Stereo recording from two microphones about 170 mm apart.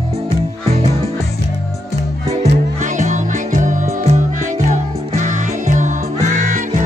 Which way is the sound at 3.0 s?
45° right (ahead or behind).